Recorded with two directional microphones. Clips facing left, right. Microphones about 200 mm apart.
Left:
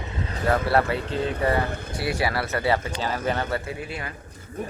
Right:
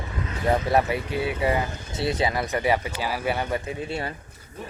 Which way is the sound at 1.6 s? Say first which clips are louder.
Left 5 dB; 55° left (ahead or behind).